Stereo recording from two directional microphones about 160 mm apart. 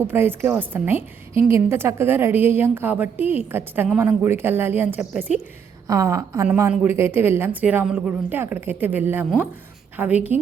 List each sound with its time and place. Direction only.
0.1 s a woman's voice: 15° right (ahead or behind)
5.9 s a woman's voice: 20° right (ahead or behind)